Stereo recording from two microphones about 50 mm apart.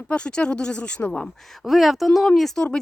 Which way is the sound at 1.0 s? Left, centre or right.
Left.